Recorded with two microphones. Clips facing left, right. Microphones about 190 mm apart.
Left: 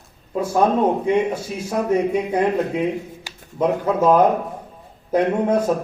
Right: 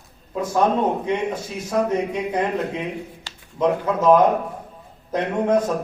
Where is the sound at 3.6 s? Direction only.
10° left (ahead or behind).